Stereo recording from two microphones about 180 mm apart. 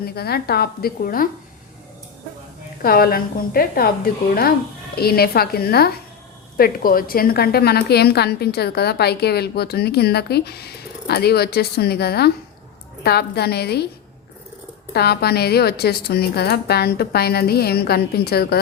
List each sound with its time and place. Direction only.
0.0 s a woman's voice: 60° left (ahead or behind)
2.8 s a woman's voice: 55° left (ahead or behind)
14.9 s a woman's voice: 65° left (ahead or behind)